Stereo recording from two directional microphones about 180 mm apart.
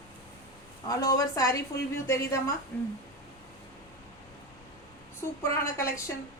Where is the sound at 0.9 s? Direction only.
20° left (ahead or behind).